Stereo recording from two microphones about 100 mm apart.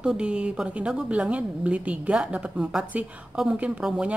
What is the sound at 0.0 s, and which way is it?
A woman's voice, 10° right (ahead or behind).